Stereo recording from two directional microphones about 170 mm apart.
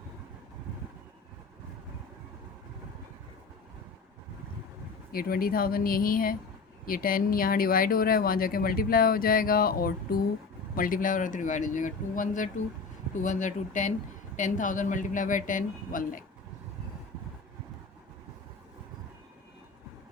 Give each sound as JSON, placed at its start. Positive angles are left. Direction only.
{"t": 5.1, "sound": "speech", "side_deg": 60}